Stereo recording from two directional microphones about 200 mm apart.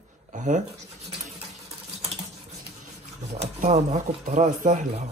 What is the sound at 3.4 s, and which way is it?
Speech, 35° right (ahead or behind).